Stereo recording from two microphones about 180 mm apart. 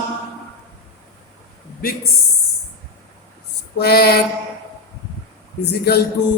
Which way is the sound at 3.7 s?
60° left (ahead or behind).